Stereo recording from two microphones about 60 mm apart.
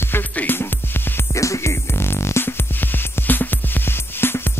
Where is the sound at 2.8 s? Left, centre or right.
Left.